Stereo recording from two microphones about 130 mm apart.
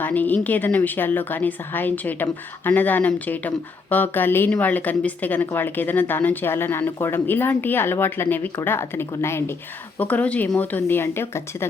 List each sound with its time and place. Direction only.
0.0 s speech: 15° left (ahead or behind)